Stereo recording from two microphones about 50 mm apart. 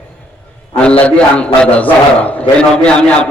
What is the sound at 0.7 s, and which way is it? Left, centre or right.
A man's voice, left.